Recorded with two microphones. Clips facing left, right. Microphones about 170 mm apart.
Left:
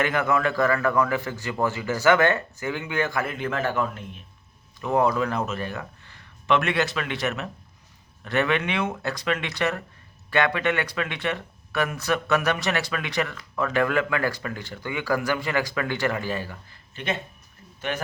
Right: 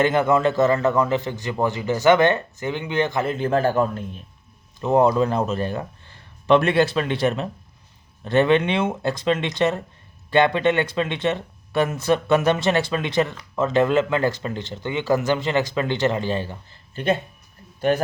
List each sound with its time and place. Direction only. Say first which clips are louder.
0.0 s speech: right 5 dB; 30° right (ahead or behind)
16.9 s speech: right 7 dB; 40° right (ahead or behind)